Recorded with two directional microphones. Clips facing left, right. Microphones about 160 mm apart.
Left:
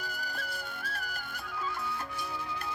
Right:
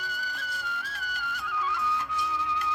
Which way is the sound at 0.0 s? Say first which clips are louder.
Right 1 dB; 55° left (ahead or behind).